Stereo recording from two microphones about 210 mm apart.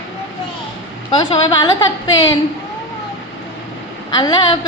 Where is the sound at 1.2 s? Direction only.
20° left (ahead or behind).